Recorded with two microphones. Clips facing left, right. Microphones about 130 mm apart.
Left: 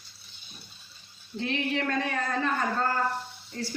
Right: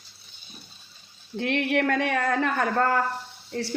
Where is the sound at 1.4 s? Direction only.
70° right (ahead or behind).